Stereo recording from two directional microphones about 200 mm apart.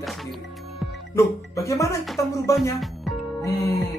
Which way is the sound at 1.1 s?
15° left (ahead or behind).